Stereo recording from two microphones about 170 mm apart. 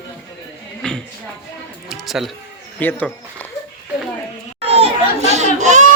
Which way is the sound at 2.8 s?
10° left (ahead or behind).